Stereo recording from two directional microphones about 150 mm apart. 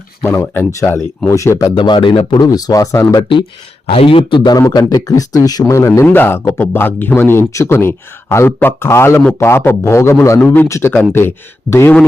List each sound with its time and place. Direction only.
0.3 s speech: 15° left (ahead or behind)